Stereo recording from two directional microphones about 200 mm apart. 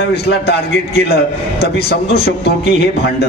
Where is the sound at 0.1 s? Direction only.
55° left (ahead or behind).